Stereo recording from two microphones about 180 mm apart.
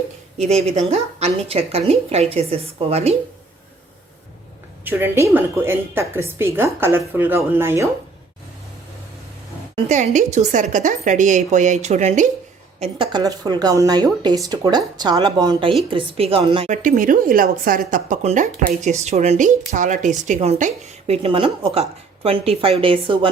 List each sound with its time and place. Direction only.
0.3 s speech: 35° right (ahead or behind)
4.9 s a woman's voice: 10° right (ahead or behind)
9.9 s a woman's voice: 40° right (ahead or behind)
12.8 s a woman's voice: 25° right (ahead or behind)
16.8 s a woman's voice: 45° right (ahead or behind); by 23.3 s 30° right (ahead or behind)